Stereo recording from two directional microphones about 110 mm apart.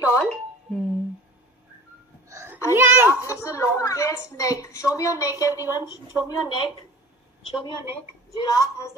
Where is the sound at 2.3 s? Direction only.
25° right (ahead or behind).